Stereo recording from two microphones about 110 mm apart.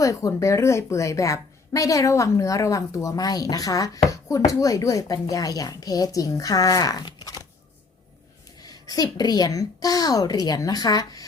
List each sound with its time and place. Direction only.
0.0 s a woman's voice: 30° left (ahead or behind)
8.5 s a woman's voice: 35° left (ahead or behind)